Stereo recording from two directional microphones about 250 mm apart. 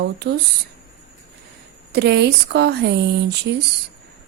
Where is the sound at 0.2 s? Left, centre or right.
Right.